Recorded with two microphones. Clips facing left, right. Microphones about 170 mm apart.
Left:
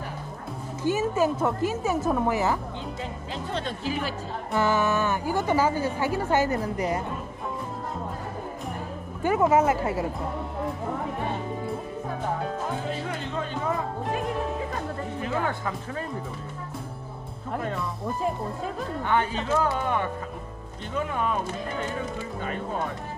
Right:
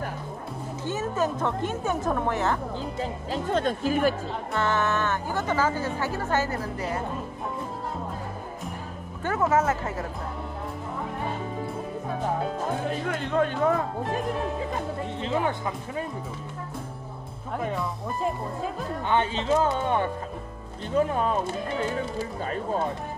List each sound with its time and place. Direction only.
0.8 s speech: 10° left (ahead or behind)
3.0 s speech: 45° right (ahead or behind)
4.6 s speech: 10° left (ahead or behind)
9.2 s speech: 15° left (ahead or behind)
13.1 s a man's voice: 60° right (ahead or behind)
15.1 s speech: 20° right (ahead or behind)
19.0 s speech: 25° right (ahead or behind)